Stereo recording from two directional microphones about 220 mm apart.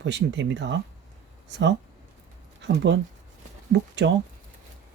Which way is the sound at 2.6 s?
50° right (ahead or behind).